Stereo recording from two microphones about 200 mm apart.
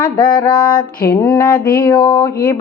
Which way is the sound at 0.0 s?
20° left (ahead or behind).